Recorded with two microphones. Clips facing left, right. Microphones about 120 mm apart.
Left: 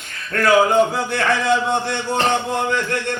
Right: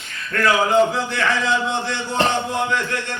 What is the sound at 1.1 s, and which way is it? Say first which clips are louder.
Speech: left 3 dB; 55° left (ahead or behind).